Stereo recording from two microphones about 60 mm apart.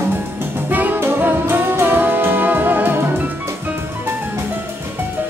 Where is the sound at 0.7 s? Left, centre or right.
Right.